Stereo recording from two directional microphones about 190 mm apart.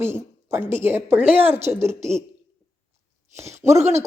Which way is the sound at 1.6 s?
15° right (ahead or behind).